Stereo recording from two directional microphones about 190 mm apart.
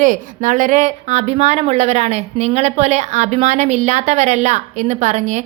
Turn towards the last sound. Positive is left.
turn(degrees=-40)  # may be behind; listen again after turning